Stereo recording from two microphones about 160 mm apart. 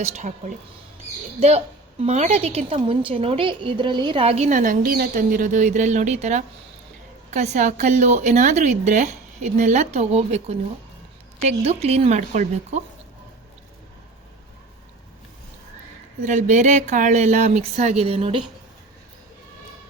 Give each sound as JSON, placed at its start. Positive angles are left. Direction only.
{"t": 0.0, "sound": "a woman's voice", "side_deg": -45}
{"t": 16.2, "sound": "a woman's voice", "side_deg": -50}